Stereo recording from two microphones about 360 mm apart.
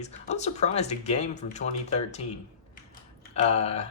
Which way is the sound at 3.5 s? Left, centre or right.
Centre.